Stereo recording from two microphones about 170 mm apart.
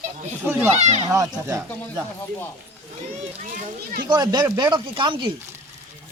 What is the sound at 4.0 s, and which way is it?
Speech, 25° right (ahead or behind).